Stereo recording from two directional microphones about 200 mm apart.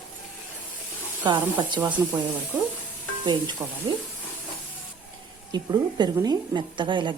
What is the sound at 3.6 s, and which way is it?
Speech, 15° right (ahead or behind).